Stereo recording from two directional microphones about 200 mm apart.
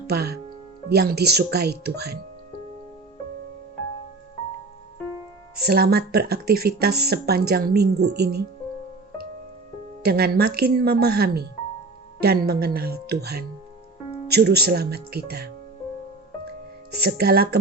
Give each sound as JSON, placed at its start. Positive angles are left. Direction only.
{"t": 0.1, "sound": "speech", "side_deg": -50}
{"t": 5.6, "sound": "speech", "side_deg": -50}
{"t": 10.0, "sound": "speech", "side_deg": -50}
{"t": 16.9, "sound": "speech", "side_deg": -50}